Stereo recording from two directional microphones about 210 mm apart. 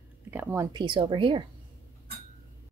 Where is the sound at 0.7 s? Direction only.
20° right (ahead or behind).